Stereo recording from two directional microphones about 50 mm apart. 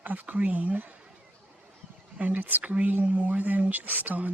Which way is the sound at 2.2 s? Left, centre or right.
Right.